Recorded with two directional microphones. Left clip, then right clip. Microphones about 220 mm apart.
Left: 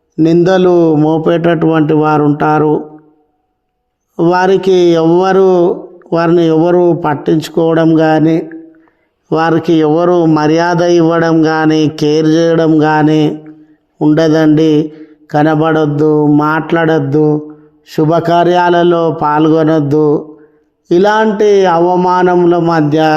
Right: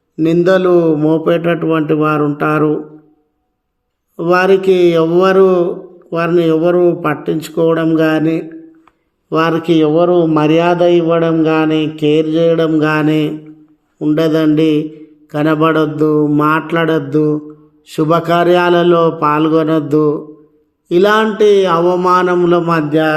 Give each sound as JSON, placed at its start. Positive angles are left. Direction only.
{"t": 0.2, "sound": "a man's voice", "side_deg": 25}
{"t": 4.2, "sound": "a man's voice", "side_deg": 30}